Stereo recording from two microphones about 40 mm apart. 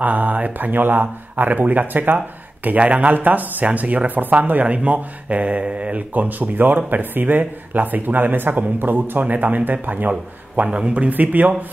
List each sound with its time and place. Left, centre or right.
0.0 s speech: right
2.8 s speech: right
5.9 s speech: right
10.7 s speech: right